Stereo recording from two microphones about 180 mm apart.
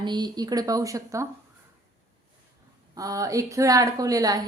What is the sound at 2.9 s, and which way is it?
A woman's voice, 20° right (ahead or behind).